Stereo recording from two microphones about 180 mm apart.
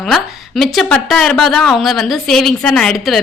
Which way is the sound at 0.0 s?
Centre (ahead or behind).